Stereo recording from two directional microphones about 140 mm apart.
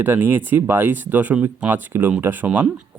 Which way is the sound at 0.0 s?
15° right (ahead or behind).